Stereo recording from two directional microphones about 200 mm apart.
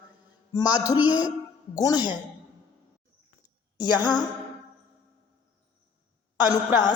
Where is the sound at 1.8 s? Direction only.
20° left (ahead or behind).